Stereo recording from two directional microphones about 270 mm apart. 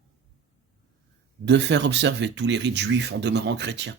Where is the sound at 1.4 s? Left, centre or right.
Right.